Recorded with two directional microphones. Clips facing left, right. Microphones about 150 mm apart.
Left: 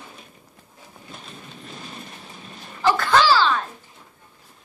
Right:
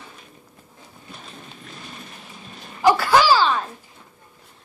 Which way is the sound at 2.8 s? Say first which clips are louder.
Right 2 dB; 10° right (ahead or behind).